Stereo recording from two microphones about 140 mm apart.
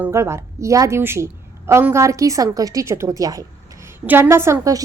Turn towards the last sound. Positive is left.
turn(degrees=-20)  # may be behind; listen again after turning